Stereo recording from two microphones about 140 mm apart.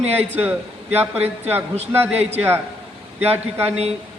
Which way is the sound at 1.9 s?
15° right (ahead or behind).